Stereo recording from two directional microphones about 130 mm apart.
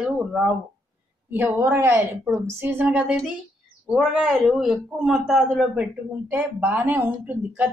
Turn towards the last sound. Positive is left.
turn(degrees=-15)  # may be behind; listen again after turning